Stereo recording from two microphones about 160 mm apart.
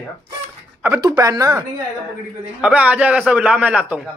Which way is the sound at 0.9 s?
20° right (ahead or behind).